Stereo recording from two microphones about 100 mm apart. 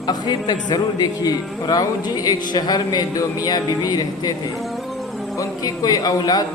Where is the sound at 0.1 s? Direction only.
45° left (ahead or behind).